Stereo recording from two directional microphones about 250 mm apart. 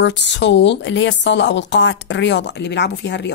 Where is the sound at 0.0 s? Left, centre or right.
Left.